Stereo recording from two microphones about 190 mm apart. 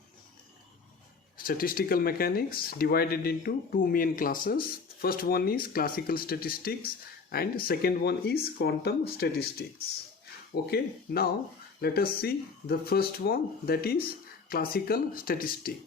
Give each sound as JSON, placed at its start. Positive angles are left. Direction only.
{"t": 1.4, "sound": "speech", "side_deg": 50}